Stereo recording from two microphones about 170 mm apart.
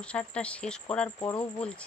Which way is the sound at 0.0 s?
5° left (ahead or behind).